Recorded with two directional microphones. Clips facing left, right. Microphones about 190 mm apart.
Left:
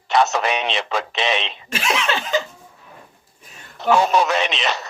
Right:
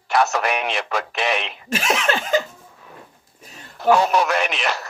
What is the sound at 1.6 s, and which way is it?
Laughter, 45° right (ahead or behind).